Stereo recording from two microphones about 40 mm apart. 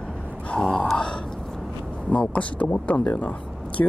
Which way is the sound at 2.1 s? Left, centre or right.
Left.